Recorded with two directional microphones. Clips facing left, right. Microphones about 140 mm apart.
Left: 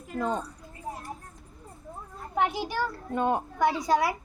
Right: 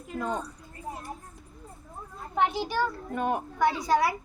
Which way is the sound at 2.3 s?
15° left (ahead or behind).